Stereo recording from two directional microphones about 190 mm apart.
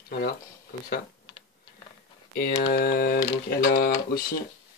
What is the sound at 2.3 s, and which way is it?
Typing, 50° left (ahead or behind).